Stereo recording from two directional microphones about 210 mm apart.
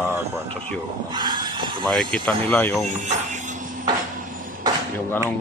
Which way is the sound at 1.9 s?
5° left (ahead or behind).